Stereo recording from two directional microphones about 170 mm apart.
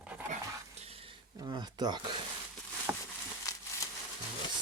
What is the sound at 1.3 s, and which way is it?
Speech, 25° right (ahead or behind).